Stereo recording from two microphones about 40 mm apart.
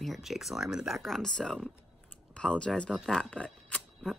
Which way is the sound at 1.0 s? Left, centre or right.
Centre.